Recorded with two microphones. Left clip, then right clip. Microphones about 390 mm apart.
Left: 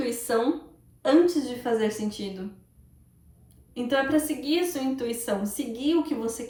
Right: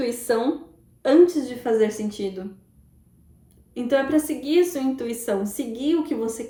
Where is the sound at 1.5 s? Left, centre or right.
Centre.